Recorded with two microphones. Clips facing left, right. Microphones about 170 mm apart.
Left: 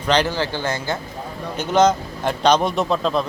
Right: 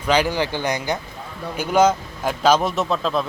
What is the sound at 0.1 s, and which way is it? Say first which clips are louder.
A man's voice: even; 10° right (ahead or behind).